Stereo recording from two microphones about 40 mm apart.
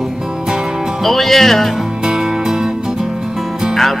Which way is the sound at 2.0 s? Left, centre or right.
Centre.